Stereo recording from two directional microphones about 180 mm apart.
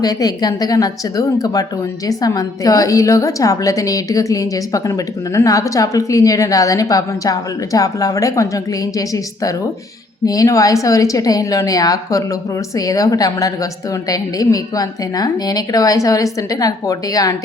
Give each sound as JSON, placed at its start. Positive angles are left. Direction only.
{"t": 0.0, "sound": "a woman's voice", "side_deg": 20}